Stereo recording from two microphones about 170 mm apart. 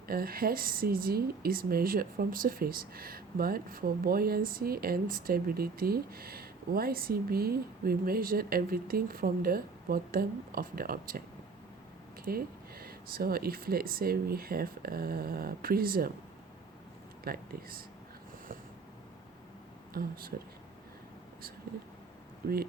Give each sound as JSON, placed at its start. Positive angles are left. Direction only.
{"t": 0.1, "sound": "speech", "side_deg": -60}
{"t": 12.2, "sound": "speech", "side_deg": -60}
{"t": 17.2, "sound": "speech", "side_deg": -60}
{"t": 19.9, "sound": "speech", "side_deg": -60}
{"t": 22.4, "sound": "speech", "side_deg": -65}